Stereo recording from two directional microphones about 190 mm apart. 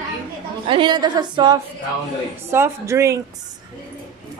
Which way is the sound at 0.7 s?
25° right (ahead or behind).